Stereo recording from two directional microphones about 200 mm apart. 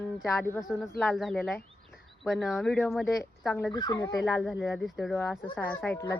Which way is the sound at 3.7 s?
20° left (ahead or behind).